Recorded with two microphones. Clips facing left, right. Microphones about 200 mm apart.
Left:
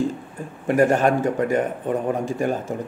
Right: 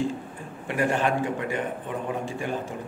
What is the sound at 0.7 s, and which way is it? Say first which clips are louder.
A man's voice: left 7 dB; 45° left (ahead or behind).